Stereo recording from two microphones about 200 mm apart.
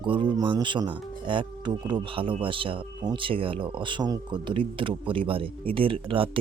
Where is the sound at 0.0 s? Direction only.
25° right (ahead or behind).